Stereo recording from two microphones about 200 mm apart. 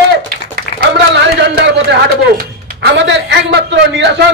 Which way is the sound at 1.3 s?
60° right (ahead or behind).